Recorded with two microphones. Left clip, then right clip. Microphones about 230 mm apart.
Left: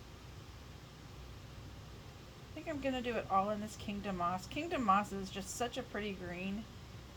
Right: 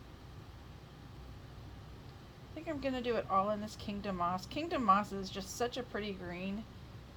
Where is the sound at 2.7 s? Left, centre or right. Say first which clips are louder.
Right 2 dB; right.